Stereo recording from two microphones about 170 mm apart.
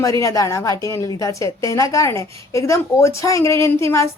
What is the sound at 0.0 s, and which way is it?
A woman's voice, 20° left (ahead or behind).